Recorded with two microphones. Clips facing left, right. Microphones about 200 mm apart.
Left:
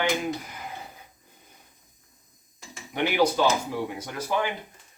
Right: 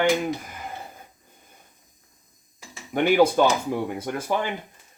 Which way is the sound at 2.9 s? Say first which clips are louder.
Right 5 dB; 50° right (ahead or behind).